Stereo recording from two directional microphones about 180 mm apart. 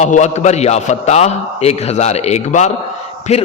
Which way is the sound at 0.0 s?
40° left (ahead or behind).